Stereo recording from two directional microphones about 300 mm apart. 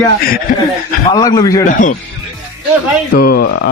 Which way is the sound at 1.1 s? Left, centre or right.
Centre.